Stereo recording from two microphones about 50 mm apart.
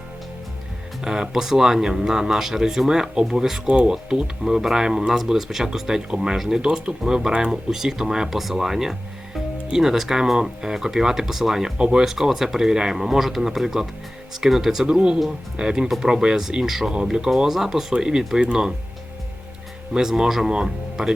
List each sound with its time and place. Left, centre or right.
1.0 s speech: centre
3.7 s speech: centre
11.8 s speech: right
12.0 s speech: centre
14.8 s speech: centre
19.9 s speech: centre